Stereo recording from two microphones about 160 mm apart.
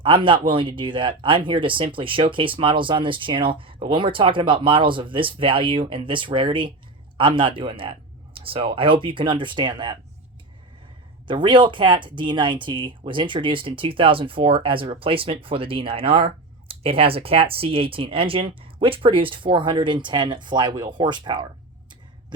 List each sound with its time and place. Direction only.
0.0 s speech: 30° right (ahead or behind)
11.3 s speech: 30° right (ahead or behind)